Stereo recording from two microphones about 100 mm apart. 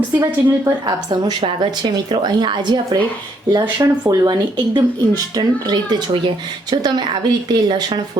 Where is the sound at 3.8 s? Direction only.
40° right (ahead or behind).